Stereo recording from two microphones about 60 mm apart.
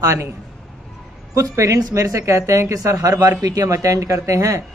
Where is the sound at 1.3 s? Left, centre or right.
Right.